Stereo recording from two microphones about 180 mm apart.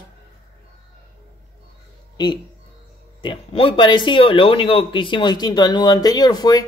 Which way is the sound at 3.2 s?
30° left (ahead or behind).